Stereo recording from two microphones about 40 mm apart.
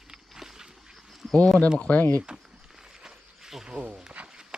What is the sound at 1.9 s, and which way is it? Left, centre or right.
Speech, left.